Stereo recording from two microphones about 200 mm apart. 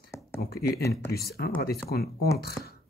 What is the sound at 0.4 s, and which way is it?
Speech, 50° left (ahead or behind).